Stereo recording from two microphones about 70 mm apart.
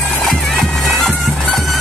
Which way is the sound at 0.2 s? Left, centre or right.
Centre.